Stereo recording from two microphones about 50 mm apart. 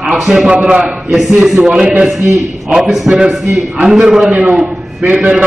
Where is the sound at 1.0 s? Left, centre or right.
Centre.